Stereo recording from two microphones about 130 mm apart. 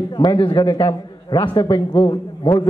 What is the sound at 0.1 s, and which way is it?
A man's voice, 35° left (ahead or behind).